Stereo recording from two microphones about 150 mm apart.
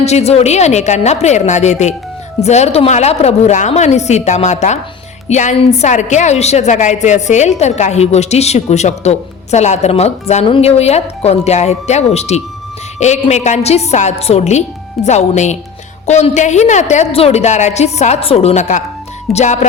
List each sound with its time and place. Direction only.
0.0 s a woman's voice: 45° left (ahead or behind)